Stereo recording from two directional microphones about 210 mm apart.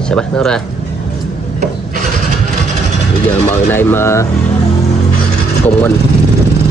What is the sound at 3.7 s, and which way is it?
Speech, 10° left (ahead or behind).